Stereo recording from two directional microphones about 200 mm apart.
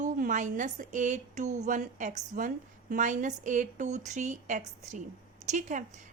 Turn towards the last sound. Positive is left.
turn(degrees=-40)  # may be behind; listen again after turning